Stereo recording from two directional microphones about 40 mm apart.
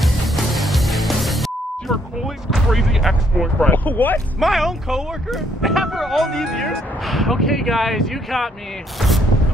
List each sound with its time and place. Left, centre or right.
0.0 s music: centre
3.5 s speech: left
4.4 s speech: centre
6.3 s speech: centre